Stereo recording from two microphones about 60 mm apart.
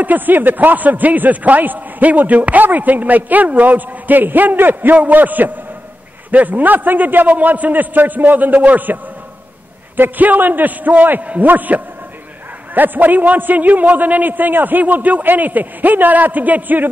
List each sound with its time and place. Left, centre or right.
0.0 s a man's voice: right